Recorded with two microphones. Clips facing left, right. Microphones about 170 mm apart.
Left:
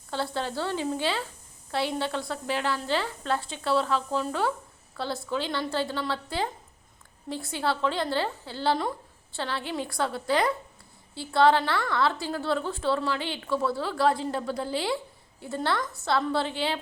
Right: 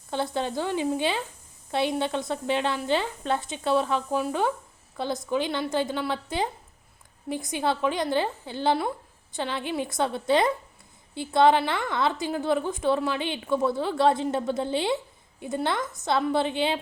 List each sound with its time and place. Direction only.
0.1 s a woman's voice: 20° right (ahead or behind)